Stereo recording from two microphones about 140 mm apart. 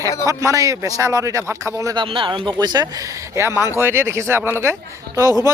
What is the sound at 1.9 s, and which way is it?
Speech, 40° right (ahead or behind).